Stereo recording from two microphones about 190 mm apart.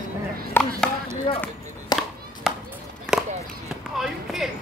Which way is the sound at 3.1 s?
5° right (ahead or behind).